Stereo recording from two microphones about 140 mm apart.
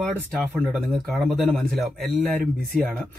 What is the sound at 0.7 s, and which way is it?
Speech, centre (ahead or behind).